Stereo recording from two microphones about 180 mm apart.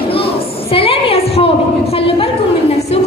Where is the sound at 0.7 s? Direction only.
30° left (ahead or behind).